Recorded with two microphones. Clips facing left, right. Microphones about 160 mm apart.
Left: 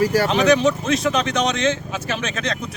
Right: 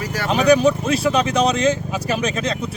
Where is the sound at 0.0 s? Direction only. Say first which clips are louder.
Left 9 dB; 30° left (ahead or behind).